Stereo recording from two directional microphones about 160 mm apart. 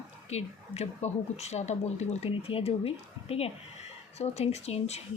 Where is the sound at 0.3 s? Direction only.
40° left (ahead or behind).